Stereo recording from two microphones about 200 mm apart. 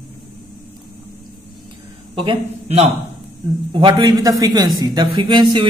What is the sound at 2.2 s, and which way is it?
A man's voice, 30° right (ahead or behind).